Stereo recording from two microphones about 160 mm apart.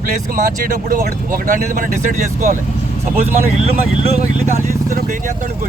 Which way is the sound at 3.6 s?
40° right (ahead or behind).